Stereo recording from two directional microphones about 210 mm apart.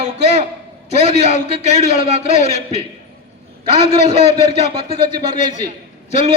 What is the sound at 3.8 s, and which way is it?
Speech, 35° left (ahead or behind).